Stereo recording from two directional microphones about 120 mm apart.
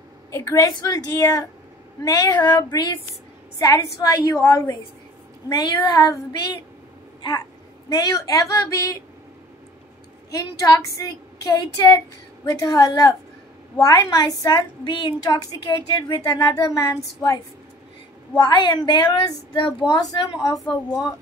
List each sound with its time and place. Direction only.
0.3 s speech: 25° left (ahead or behind)
5.5 s speech: 35° left (ahead or behind)
10.3 s speech: 30° left (ahead or behind)
20.6 s a woman's voice: 5° left (ahead or behind)